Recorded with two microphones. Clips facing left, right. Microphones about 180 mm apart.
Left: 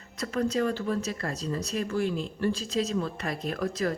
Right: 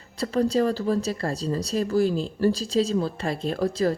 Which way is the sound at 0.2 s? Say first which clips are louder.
Right 5 dB; 35° right (ahead or behind).